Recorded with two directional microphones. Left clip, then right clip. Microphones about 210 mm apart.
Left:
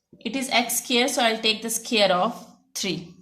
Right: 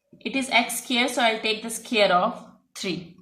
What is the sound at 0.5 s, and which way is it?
A woman's voice, 45° left (ahead or behind).